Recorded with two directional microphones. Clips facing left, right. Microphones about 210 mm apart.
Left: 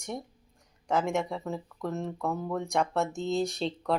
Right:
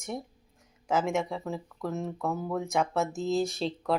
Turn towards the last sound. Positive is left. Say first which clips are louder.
# even
turn(degrees=0)  # may be behind; listen again after turning